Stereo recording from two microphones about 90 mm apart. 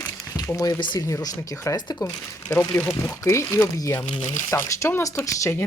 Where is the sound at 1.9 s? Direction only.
40° left (ahead or behind).